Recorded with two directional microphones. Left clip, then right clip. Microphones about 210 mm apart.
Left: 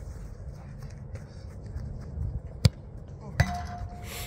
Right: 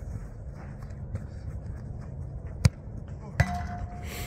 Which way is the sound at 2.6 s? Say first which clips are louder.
Left 1 dB; 5° right (ahead or behind).